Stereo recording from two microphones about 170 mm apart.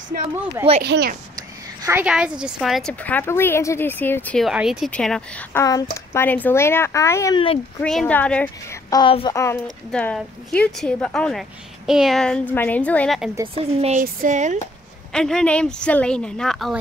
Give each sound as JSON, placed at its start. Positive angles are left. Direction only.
{"t": 0.1, "sound": "speech", "side_deg": -65}
{"t": 0.8, "sound": "a woman's voice", "side_deg": -80}
{"t": 1.9, "sound": "a woman's voice", "side_deg": -10}
{"t": 4.5, "sound": "speech", "side_deg": -5}
{"t": 5.5, "sound": "a woman's voice", "side_deg": 20}
{"t": 7.8, "sound": "a woman's voice", "side_deg": 5}
{"t": 8.9, "sound": "a woman's voice", "side_deg": 30}
{"t": 9.3, "sound": "a woman's voice", "side_deg": 15}
{"t": 9.8, "sound": "speech", "side_deg": 5}
{"t": 13.7, "sound": "speech", "side_deg": -45}
{"t": 15.1, "sound": "speech", "side_deg": 5}